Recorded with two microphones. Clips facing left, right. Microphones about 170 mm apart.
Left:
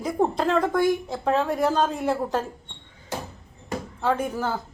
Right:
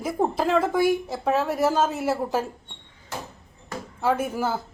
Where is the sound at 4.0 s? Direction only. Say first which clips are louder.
Right 1 dB; 5° right (ahead or behind).